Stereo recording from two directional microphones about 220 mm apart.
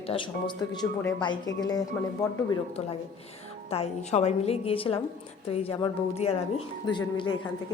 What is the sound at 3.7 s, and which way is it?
A woman's voice, 30° left (ahead or behind).